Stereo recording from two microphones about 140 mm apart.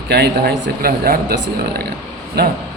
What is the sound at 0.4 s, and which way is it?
Speech, 90° right.